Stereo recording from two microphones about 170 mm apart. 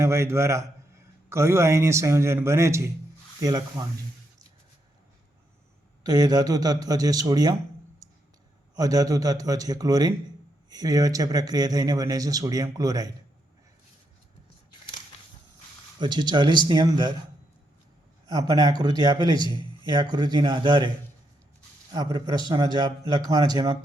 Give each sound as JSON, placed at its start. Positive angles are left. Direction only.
{"t": 0.0, "sound": "a man's voice", "side_deg": -15}
{"t": 6.0, "sound": "speech", "side_deg": -25}
{"t": 8.7, "sound": "speech", "side_deg": -20}
{"t": 16.0, "sound": "speech", "side_deg": -25}
{"t": 18.3, "sound": "speech", "side_deg": -20}
{"t": 21.9, "sound": "speech", "side_deg": -25}